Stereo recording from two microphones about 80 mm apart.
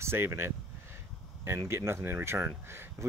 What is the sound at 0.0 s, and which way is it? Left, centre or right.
Speech, right.